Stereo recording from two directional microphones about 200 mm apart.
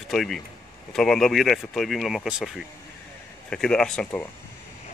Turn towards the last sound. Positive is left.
turn(degrees=5)  # may be behind; listen again after turning